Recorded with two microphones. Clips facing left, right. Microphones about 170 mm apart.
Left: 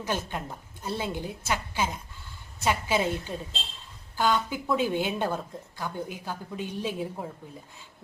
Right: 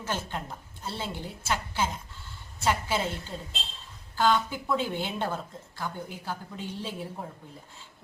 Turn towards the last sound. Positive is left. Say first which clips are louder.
# left 4 dB
turn(degrees=15)  # may be behind; listen again after turning